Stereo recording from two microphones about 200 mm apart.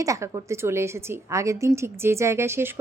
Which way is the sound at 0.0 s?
15° right (ahead or behind).